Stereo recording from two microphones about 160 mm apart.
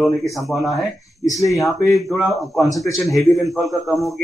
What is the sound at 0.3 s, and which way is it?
Speech, centre (ahead or behind).